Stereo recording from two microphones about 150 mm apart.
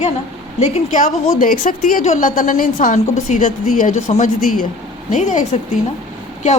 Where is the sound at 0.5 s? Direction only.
50° left (ahead or behind).